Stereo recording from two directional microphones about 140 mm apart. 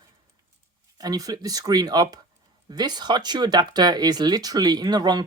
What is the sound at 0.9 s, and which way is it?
Speech, 30° right (ahead or behind).